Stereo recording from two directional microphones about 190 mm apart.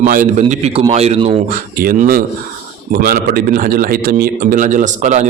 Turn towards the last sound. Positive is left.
turn(degrees=-40)  # may be behind; listen again after turning